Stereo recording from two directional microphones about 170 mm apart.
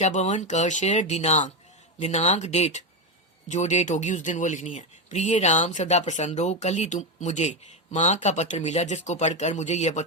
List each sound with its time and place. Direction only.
0.0 s speech: 45° left (ahead or behind)